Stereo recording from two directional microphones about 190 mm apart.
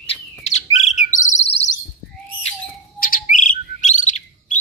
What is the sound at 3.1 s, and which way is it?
Bird, 40° left (ahead or behind).